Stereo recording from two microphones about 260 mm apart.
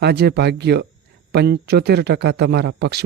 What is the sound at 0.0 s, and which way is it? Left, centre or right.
Speech, right.